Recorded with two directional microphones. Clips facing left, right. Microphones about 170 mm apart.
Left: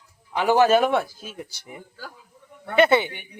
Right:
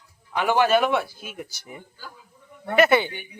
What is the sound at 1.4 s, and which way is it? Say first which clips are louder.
A man's voice: right 1 dB; 20° left (ahead or behind).